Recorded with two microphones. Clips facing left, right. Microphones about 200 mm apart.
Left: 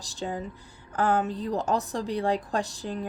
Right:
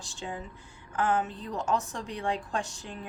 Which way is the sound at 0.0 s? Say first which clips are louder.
Left 5 dB; 35° left (ahead or behind).